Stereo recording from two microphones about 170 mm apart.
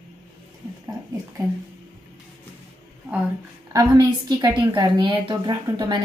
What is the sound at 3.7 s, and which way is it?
A woman's voice, 20° right (ahead or behind).